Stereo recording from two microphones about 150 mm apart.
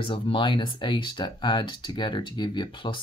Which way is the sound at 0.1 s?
35° left (ahead or behind).